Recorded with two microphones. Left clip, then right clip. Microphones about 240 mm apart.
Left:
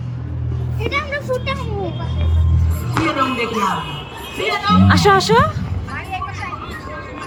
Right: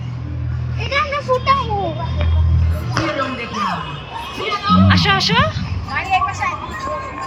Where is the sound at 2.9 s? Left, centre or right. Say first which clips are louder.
Left 2 dB; left.